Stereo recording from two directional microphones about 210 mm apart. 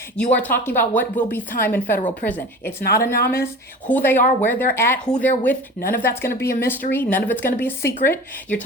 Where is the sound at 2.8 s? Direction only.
45° left (ahead or behind).